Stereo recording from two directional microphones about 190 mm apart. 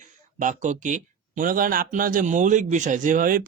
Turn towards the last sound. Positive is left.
turn(degrees=-45)  # may be behind; listen again after turning